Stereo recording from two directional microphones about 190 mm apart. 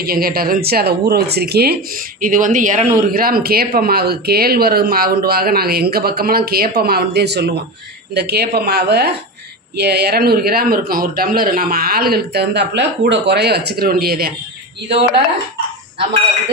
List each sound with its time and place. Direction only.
0.0 s speech: 50° right (ahead or behind)
2.2 s speech: 45° right (ahead or behind)